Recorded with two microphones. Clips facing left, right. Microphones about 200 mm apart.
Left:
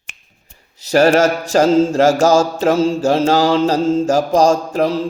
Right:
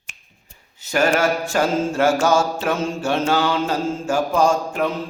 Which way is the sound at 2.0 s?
90° left.